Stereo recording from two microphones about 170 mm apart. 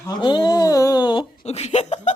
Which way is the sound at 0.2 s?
25° left (ahead or behind).